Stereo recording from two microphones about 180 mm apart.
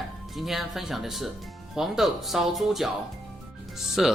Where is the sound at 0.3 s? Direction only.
Centre (ahead or behind).